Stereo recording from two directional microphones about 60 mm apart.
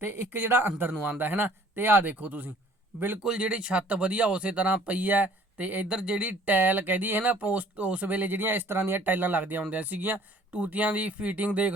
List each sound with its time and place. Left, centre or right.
0.0 s speech: right
3.2 s speech: centre
5.9 s speech: centre